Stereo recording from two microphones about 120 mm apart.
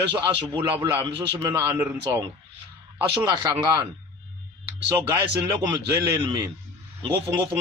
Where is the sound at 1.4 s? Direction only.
30° right (ahead or behind).